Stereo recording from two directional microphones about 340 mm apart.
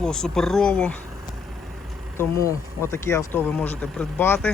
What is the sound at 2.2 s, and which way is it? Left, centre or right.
Speech, centre.